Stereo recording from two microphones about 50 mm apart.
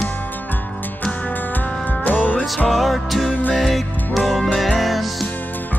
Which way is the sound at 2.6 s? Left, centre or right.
Centre.